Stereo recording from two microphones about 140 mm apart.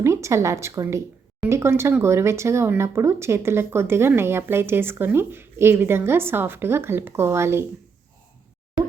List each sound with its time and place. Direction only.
0.0 s speech: 20° right (ahead or behind)